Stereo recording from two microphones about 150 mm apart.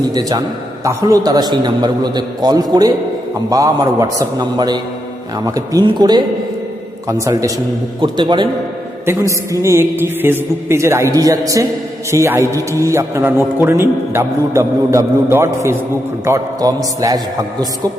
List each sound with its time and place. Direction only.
0.1 s a man's voice: 25° right (ahead or behind)
9.0 s a man's voice: 20° right (ahead or behind)